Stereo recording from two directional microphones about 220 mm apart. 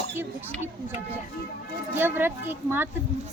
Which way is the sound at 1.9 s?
10° right (ahead or behind).